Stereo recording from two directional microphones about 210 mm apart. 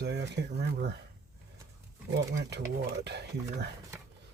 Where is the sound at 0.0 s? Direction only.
55° right (ahead or behind).